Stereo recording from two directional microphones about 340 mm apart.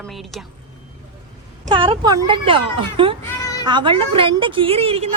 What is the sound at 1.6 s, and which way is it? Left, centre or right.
A woman's voice, centre.